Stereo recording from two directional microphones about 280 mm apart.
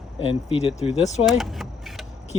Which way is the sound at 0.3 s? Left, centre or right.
Left.